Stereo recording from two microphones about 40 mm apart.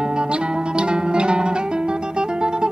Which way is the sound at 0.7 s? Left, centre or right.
Right.